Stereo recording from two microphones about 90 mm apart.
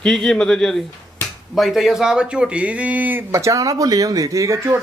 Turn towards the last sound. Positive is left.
turn(degrees=-35)  # may be behind; listen again after turning